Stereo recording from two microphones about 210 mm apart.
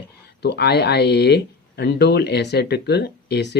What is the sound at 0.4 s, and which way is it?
Speech, 50° left (ahead or behind).